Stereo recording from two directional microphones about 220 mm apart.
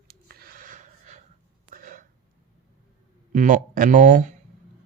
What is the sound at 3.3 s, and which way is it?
Speech, 35° right (ahead or behind).